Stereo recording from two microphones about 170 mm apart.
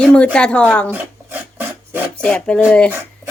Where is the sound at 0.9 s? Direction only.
10° right (ahead or behind).